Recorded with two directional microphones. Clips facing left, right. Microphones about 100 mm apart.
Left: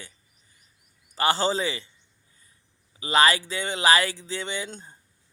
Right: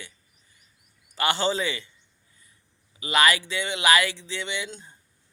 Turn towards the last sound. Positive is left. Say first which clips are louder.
# even
turn(degrees=40)  # may be behind; listen again after turning